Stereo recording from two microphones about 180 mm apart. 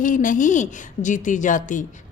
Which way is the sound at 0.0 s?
45° left (ahead or behind).